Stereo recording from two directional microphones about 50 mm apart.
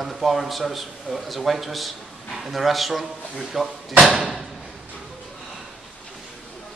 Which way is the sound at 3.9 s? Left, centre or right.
Centre.